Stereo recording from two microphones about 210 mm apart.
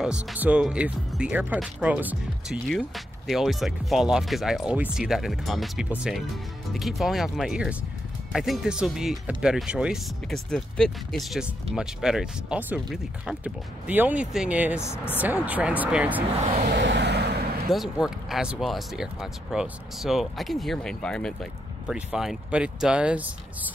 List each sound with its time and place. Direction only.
0.0 s speech: 5° right (ahead or behind)
14.8 s speech: 10° left (ahead or behind)
15.2 s speech: 10° right (ahead or behind)
16.7 s vehicle: 55° right (ahead or behind)
17.6 s speech: centre (ahead or behind)